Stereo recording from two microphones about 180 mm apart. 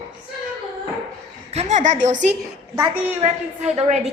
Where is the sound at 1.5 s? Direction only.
40° right (ahead or behind).